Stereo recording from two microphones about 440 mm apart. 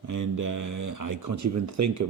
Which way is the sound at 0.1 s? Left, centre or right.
Right.